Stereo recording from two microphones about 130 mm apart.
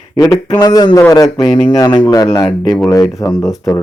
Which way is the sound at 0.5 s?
30° left (ahead or behind).